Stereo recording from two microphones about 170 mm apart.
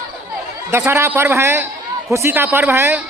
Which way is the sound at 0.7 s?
15° right (ahead or behind).